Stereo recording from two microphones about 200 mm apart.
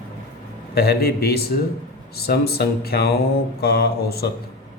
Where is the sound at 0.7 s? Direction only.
50° left (ahead or behind).